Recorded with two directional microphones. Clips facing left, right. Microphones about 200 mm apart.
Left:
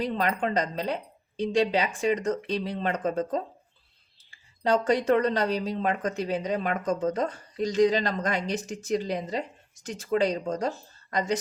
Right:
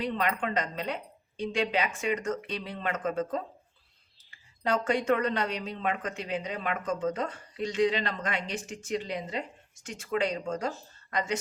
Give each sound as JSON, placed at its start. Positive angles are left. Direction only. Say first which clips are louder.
{"t": 0.0, "sound": "speech", "louder": "left 3 dB", "side_deg": 40}